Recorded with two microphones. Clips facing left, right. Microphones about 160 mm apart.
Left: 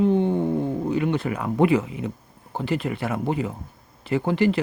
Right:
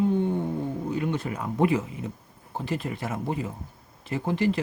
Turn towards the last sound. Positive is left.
turn(degrees=75)  # may be behind; listen again after turning